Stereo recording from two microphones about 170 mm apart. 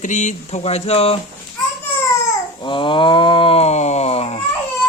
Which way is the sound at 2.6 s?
30° left (ahead or behind).